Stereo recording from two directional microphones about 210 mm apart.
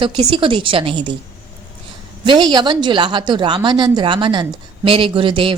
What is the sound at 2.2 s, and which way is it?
Speech, 20° right (ahead or behind).